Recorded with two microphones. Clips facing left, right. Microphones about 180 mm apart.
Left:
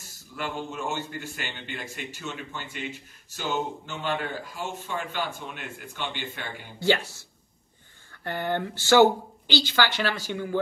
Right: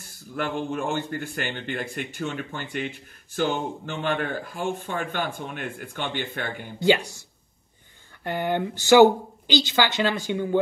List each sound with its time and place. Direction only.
0.4 s a man's voice: 55° right (ahead or behind)
6.8 s speech: 15° right (ahead or behind)